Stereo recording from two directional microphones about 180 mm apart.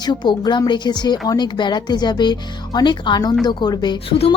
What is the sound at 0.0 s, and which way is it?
Speech, 25° left (ahead or behind).